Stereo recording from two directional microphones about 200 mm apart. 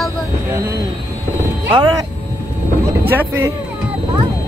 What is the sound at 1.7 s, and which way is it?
Speech, 20° right (ahead or behind).